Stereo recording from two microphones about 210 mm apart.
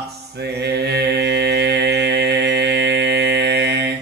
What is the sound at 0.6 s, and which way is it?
Mantra, 55° right (ahead or behind).